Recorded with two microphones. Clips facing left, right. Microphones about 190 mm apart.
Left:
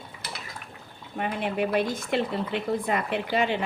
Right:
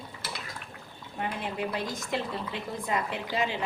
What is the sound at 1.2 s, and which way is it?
A woman's voice, 65° left (ahead or behind).